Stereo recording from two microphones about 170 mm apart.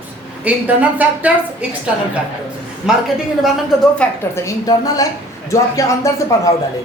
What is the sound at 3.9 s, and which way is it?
A woman's voice, 15° left (ahead or behind).